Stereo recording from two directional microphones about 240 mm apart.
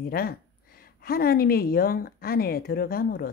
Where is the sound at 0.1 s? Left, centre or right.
Left.